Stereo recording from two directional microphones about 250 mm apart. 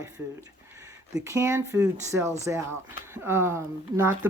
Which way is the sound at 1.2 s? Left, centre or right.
Centre.